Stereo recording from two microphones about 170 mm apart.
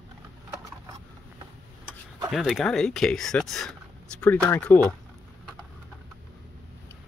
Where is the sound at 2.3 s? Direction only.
Centre (ahead or behind).